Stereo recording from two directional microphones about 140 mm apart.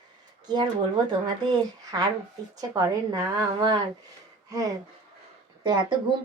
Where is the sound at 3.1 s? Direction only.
25° right (ahead or behind).